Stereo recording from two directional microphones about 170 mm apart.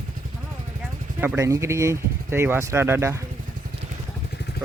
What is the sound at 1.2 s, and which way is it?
Speech, 15° right (ahead or behind).